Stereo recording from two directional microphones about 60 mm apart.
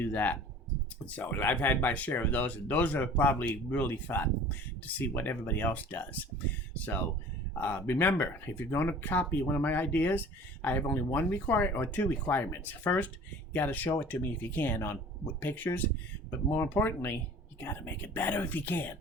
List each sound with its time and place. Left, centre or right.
0.0 s speech: left
7.6 s speech: left